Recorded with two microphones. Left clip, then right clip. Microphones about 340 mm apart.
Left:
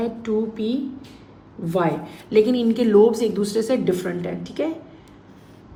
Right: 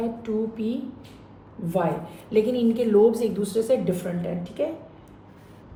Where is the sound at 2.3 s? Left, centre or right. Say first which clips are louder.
Left 4 dB; left.